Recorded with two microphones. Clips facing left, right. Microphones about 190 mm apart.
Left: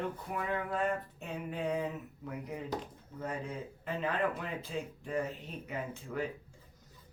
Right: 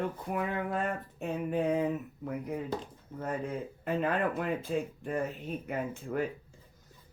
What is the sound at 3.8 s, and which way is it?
Speech, 55° right (ahead or behind).